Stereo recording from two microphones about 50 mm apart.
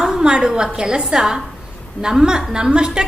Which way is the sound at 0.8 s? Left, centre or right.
Centre.